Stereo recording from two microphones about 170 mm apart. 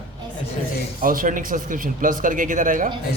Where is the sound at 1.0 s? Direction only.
55° right (ahead or behind).